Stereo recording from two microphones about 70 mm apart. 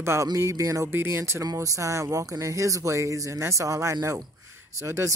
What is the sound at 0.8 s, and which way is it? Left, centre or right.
Speech, right.